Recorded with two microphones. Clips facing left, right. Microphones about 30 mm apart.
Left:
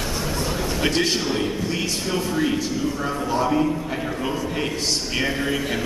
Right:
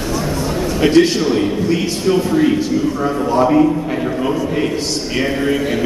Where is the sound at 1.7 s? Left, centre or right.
Centre.